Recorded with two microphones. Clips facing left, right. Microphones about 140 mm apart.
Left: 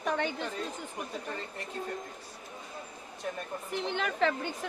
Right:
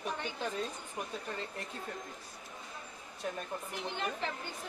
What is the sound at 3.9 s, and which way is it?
Speech, 90° left.